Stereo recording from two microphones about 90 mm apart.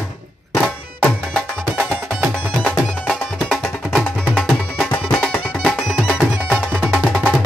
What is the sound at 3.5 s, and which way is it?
Music, 5° left (ahead or behind).